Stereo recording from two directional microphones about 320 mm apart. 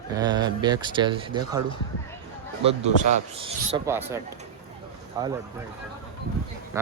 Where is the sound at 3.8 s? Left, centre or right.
Centre.